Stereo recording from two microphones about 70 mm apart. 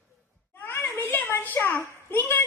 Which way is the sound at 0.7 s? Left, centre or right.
Left.